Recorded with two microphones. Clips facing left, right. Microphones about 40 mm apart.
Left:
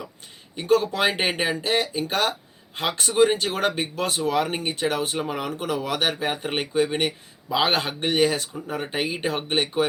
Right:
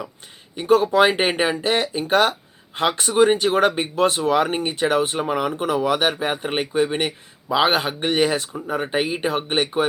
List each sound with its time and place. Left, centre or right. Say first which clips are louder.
0.5 s speech: right 5 dB; centre
3.9 s speech: right 5 dB; right; by 9.8 s centre